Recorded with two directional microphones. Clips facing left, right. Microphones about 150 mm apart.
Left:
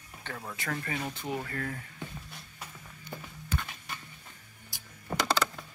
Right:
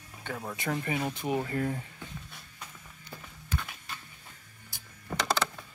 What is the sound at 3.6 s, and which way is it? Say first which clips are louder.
Music: left 1 dB; centre (ahead or behind).